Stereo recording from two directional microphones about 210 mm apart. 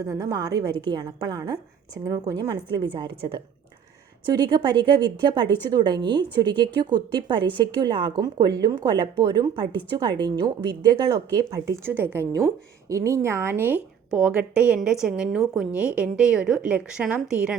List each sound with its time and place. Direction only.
0.0 s a woman's voice: 15° right (ahead or behind)